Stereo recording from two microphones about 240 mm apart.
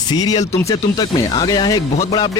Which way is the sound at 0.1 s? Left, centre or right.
Centre.